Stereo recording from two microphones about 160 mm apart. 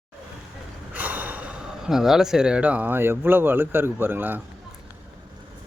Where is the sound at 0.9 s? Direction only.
10° right (ahead or behind).